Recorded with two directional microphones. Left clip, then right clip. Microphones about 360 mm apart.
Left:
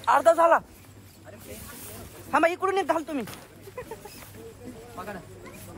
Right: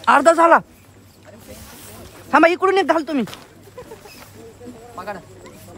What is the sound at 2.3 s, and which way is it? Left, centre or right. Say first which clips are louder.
Speech: right 9 dB; right.